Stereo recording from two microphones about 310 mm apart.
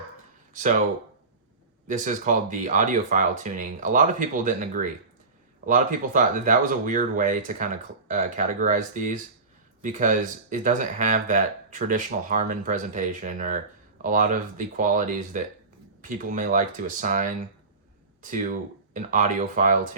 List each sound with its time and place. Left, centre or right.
1.9 s speech: right